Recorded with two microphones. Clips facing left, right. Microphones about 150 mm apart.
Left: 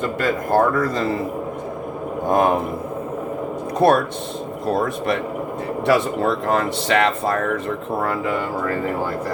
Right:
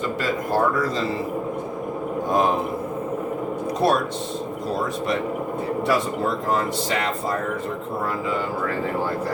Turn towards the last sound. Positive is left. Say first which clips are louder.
# left 6 dB
turn(degrees=70)  # may be behind; listen again after turning